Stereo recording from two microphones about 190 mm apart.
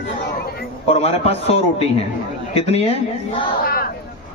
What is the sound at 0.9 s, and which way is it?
Speech, 30° left (ahead or behind).